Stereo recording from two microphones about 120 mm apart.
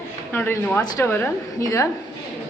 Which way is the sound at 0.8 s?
25° left (ahead or behind).